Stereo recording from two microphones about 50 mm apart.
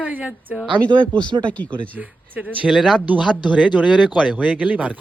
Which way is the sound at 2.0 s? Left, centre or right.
Right.